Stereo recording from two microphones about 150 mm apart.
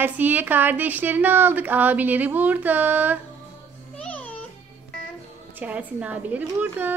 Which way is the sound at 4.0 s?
10° left (ahead or behind).